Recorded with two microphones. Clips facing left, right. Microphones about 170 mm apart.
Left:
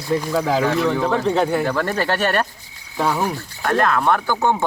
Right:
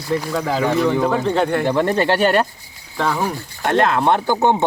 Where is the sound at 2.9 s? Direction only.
10° left (ahead or behind).